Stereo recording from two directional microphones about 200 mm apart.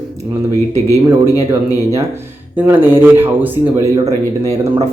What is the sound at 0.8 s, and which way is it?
Speech, 15° left (ahead or behind).